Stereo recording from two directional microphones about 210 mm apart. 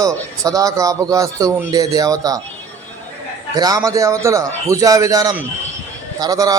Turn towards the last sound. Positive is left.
turn(degrees=-15)  # may be behind; listen again after turning